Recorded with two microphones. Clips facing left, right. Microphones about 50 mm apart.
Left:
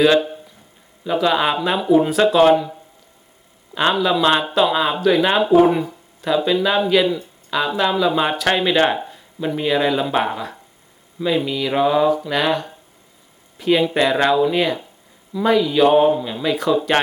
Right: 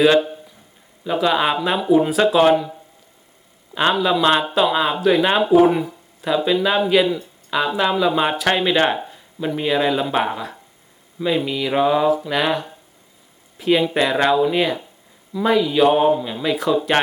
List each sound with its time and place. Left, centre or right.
0.0 s speech: centre
3.8 s speech: centre